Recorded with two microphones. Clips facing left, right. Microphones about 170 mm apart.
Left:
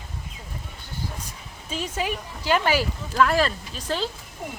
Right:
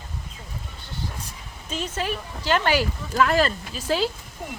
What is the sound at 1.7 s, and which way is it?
Speech, 10° left (ahead or behind).